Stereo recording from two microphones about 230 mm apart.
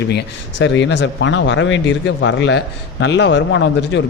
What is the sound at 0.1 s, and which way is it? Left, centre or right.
Speech, left.